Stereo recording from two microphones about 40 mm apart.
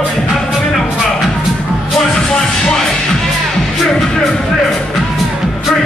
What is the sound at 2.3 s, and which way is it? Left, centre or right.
Music, centre.